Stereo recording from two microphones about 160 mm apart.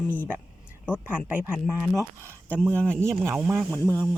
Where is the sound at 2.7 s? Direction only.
5° left (ahead or behind).